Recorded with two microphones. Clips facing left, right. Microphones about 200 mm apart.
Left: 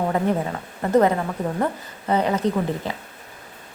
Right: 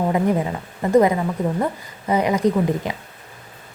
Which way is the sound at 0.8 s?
10° right (ahead or behind).